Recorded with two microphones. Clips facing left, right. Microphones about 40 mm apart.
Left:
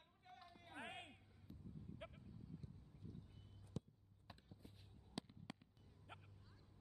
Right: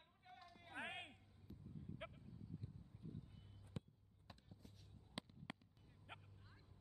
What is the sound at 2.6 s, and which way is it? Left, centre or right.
Boat, right.